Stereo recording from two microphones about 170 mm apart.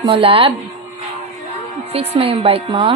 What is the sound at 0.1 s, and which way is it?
Speech, 35° right (ahead or behind).